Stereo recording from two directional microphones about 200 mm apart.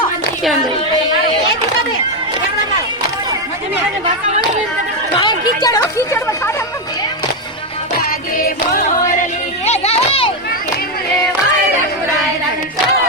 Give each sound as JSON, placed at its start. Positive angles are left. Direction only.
{"t": 5.6, "sound": "speech", "side_deg": 15}
{"t": 8.4, "sound": "music", "side_deg": 45}
{"t": 9.6, "sound": "children playing", "side_deg": 30}